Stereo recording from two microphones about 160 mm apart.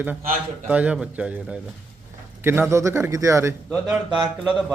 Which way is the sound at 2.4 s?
15° right (ahead or behind).